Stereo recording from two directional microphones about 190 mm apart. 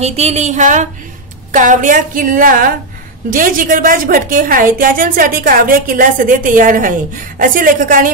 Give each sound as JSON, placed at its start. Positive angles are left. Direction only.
{"t": 0.0, "sound": "a woman's voice", "side_deg": -35}